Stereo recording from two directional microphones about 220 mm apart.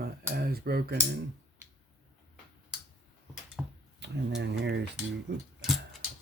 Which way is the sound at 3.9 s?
50° right (ahead or behind).